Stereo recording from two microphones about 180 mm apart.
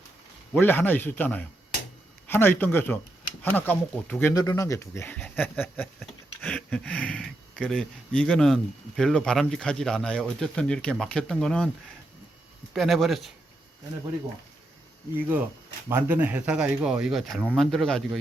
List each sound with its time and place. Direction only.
0.6 s speech: 10° left (ahead or behind)
12.7 s speech: centre (ahead or behind)
15.9 s speech: 10° right (ahead or behind)